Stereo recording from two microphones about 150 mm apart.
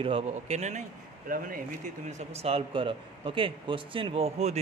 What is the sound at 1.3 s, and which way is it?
Speech, 65° right (ahead or behind).